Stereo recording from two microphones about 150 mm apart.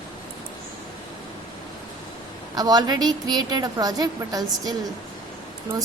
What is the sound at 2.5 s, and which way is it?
A woman's voice, 25° right (ahead or behind).